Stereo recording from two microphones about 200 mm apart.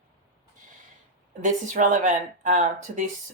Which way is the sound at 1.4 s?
40° right (ahead or behind).